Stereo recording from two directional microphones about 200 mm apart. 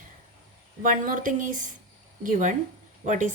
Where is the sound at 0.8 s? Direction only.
40° right (ahead or behind).